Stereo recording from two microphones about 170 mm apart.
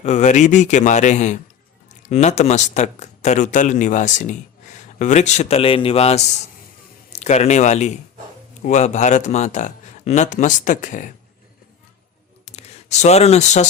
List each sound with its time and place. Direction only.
0.0 s speech: 45° left (ahead or behind)
12.5 s speech: 40° left (ahead or behind)